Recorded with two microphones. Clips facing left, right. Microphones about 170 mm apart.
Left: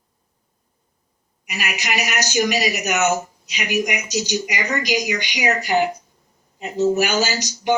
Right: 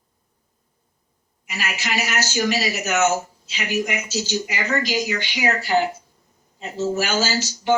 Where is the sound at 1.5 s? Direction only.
15° left (ahead or behind).